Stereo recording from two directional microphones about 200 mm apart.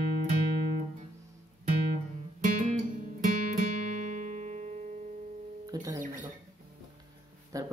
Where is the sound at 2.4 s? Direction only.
40° right (ahead or behind).